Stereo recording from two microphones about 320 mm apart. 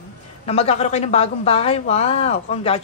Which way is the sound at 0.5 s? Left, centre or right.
Centre.